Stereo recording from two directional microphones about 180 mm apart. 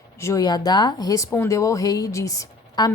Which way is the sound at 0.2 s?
15° left (ahead or behind).